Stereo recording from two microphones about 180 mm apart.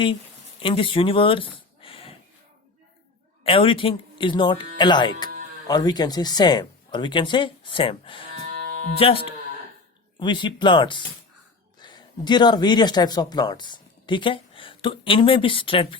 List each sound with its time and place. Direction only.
0.6 s speech: 30° left (ahead or behind)
3.4 s speech: 30° left (ahead or behind)